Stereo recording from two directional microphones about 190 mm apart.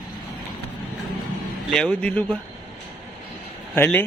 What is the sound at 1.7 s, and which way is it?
Speech, 5° left (ahead or behind).